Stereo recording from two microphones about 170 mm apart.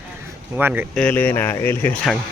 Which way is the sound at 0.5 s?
10° right (ahead or behind).